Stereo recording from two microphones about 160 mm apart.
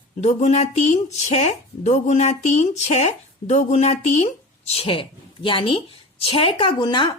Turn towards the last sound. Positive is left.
turn(degrees=30)  # may be behind; listen again after turning